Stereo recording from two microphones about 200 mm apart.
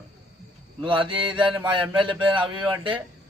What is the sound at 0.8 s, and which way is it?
Mantra, 25° right (ahead or behind).